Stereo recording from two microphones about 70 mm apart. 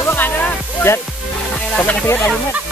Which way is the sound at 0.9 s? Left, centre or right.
Left.